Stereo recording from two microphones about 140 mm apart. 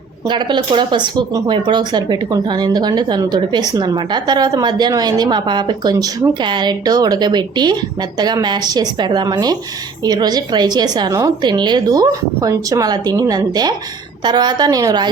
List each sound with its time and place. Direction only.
0.3 s a woman's voice: 35° right (ahead or behind)